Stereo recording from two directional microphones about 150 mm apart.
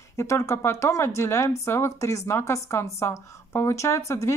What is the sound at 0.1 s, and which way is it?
Speech, 20° left (ahead or behind).